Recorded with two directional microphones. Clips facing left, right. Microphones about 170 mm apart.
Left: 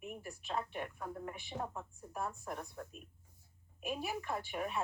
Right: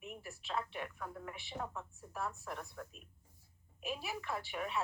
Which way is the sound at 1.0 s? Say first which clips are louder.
Left 3 dB; 30° left (ahead or behind).